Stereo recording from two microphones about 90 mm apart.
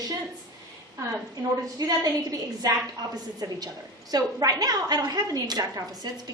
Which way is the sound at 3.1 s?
50° right (ahead or behind).